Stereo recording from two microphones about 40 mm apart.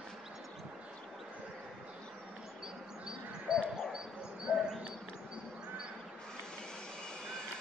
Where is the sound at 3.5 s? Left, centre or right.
Centre.